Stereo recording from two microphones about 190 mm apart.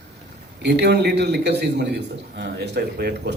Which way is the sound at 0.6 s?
60° right (ahead or behind).